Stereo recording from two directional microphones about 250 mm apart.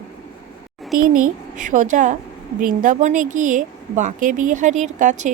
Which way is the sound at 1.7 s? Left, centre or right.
Right.